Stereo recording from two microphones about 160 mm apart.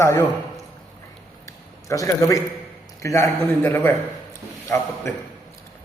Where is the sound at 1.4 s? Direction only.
20° left (ahead or behind).